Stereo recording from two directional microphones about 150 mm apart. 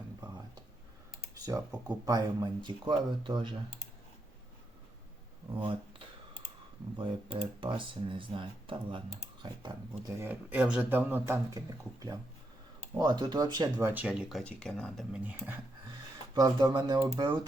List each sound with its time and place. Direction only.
2.0 s speech: 25° right (ahead or behind)
5.5 s a sound: 35° right (ahead or behind)
7.0 s speech: 35° right (ahead or behind)
10.2 s speech: 10° right (ahead or behind)
13.9 s speech: 10° right (ahead or behind)
15.1 s speech: 10° right (ahead or behind)
16.3 s speech: 25° right (ahead or behind)